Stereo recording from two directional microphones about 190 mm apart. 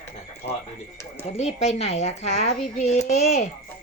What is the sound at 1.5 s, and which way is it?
Speech, 35° left (ahead or behind).